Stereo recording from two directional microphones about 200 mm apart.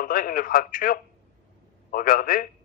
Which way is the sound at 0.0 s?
45° left (ahead or behind).